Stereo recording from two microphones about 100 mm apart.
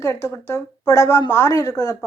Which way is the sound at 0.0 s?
30° left (ahead or behind).